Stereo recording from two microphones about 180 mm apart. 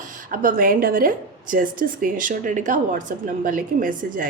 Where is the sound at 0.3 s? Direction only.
50° right (ahead or behind).